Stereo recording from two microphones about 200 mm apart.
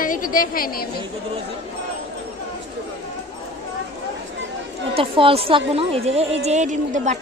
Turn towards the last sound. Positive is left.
turn(degrees=-35)  # may be behind; listen again after turning